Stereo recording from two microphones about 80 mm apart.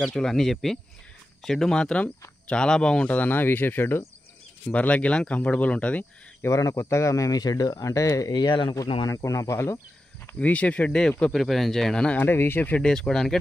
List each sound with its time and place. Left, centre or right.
0.0 s speech: centre
6.4 s speech: left
8.3 s speech: left
9.0 s speech: left
10.4 s speech: centre
12.3 s speech: left
12.8 s speech: centre